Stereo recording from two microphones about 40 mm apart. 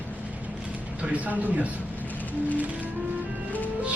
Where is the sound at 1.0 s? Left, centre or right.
Right.